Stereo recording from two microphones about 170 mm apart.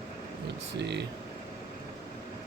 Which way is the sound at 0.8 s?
85° right.